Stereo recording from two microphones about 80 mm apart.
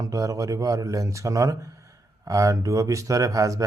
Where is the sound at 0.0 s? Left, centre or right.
Right.